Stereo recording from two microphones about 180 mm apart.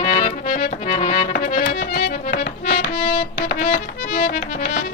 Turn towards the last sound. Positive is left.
turn(degrees=50)  # may be behind; listen again after turning